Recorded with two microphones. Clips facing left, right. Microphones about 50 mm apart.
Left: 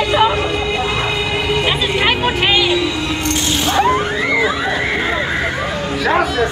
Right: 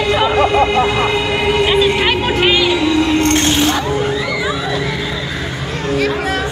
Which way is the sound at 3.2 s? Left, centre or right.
Right.